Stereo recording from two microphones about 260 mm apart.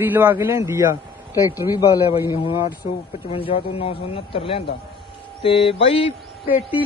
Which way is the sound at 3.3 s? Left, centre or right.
Left.